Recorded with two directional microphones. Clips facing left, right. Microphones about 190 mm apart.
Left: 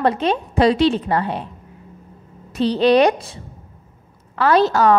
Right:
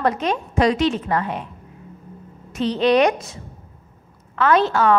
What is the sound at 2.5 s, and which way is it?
A woman's voice, 35° left (ahead or behind).